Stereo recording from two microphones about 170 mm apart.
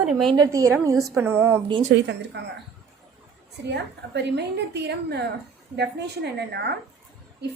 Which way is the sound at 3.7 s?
85° right.